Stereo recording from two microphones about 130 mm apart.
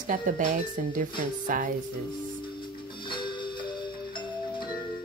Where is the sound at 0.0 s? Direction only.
80° right.